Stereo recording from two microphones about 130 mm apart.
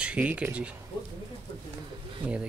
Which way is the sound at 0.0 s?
10° right (ahead or behind).